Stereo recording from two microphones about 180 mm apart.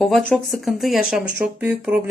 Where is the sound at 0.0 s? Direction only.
Centre (ahead or behind).